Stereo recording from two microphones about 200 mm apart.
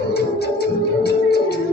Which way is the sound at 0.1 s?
55° left (ahead or behind).